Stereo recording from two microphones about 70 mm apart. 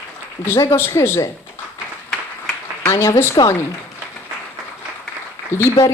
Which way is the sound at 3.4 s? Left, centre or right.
Left.